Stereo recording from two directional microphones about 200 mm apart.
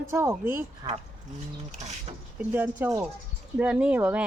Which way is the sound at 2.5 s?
10° right (ahead or behind).